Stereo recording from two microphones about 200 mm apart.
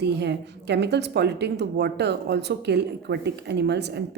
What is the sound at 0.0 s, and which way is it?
A woman's voice, 55° right (ahead or behind).